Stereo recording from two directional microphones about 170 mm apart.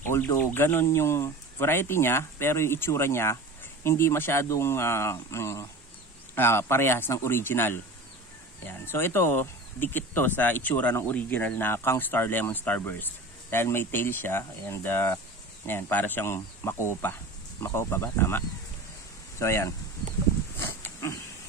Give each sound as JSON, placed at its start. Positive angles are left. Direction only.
{"t": 0.0, "sound": "speech", "side_deg": 15}
{"t": 20.5, "sound": "livestock", "side_deg": 15}